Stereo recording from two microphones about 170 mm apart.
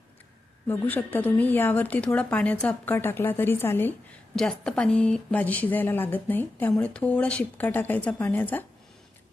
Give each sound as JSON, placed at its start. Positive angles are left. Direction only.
{"t": 0.7, "sound": "a woman's voice", "side_deg": 10}